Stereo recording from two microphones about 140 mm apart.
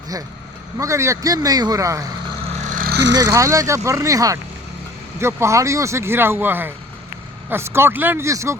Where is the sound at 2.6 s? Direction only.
75° right (ahead or behind).